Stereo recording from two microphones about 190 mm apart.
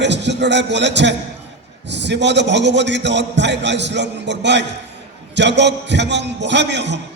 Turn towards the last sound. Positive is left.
turn(degrees=-65)  # may be behind; listen again after turning